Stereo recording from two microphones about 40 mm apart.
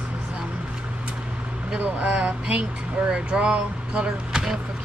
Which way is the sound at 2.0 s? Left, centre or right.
Right.